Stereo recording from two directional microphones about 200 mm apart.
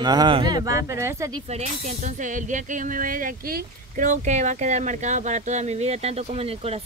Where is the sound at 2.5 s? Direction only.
45° right (ahead or behind).